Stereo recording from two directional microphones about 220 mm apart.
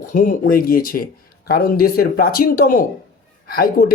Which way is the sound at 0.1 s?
40° left (ahead or behind).